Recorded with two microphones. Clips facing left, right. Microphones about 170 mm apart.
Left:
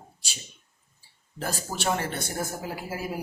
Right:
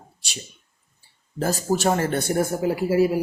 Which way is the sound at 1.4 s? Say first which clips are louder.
Right 8 dB; 40° right (ahead or behind).